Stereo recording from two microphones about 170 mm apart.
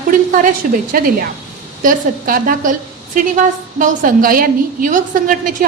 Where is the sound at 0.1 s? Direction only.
50° right (ahead or behind).